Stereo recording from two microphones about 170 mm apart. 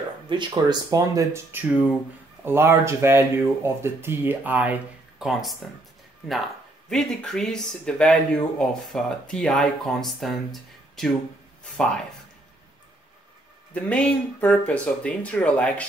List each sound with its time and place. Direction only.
0.3 s speech: 25° right (ahead or behind); by 5.6 s centre (ahead or behind)
6.9 s speech: 5° left (ahead or behind)
13.7 s speech: 5° left (ahead or behind)